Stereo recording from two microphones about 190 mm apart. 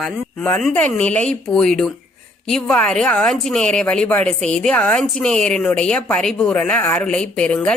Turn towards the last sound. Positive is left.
turn(degrees=5)  # may be behind; listen again after turning